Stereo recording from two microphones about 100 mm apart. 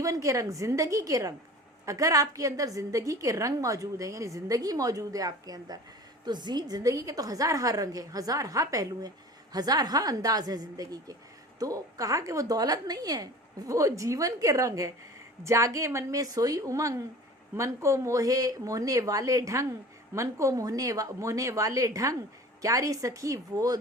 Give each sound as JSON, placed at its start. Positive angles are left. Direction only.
{"t": 0.0, "sound": "a woman's voice", "side_deg": -35}